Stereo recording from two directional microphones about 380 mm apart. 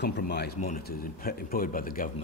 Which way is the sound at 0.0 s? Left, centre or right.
Left.